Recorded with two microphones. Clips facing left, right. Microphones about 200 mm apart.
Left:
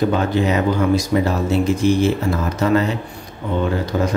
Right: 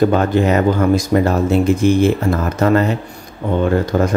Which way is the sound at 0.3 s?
50° right (ahead or behind).